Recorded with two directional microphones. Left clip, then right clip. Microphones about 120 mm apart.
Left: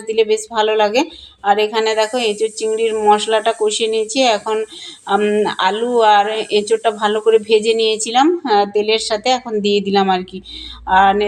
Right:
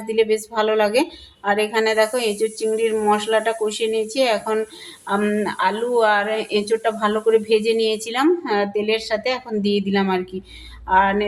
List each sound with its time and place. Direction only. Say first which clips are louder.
0.1 s speech: left 4 dB; 15° left (ahead or behind)
10.8 s music: left 5 dB; 20° left (ahead or behind)